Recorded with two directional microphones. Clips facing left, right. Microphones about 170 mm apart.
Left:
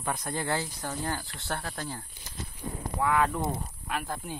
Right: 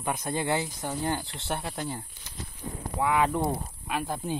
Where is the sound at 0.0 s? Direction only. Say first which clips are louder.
Right 3 dB; 20° right (ahead or behind).